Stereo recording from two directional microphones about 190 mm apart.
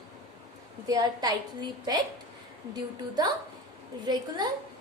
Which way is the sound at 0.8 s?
20° right (ahead or behind).